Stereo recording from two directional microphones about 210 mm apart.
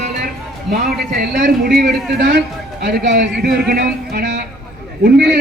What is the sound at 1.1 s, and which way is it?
Speech, 45° right (ahead or behind).